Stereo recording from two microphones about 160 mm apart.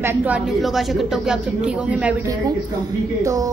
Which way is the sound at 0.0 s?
15° right (ahead or behind).